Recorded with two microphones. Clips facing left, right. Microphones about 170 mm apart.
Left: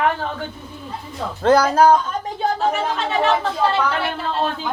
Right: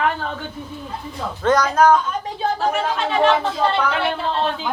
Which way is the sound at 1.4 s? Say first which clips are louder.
Left 2 dB; 30° left (ahead or behind).